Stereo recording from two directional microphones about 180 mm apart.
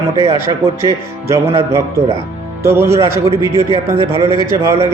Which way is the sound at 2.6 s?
15° right (ahead or behind).